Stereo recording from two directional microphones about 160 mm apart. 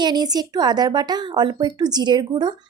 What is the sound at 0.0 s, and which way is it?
Speech, 25° right (ahead or behind).